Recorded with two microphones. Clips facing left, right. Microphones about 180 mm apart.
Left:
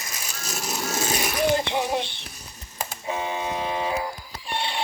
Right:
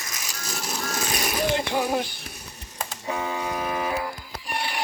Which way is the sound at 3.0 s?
20° left (ahead or behind).